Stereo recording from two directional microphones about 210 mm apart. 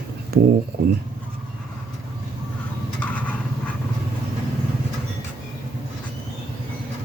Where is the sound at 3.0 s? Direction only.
5° left (ahead or behind).